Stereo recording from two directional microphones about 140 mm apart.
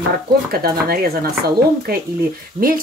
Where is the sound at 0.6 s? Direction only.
90° right.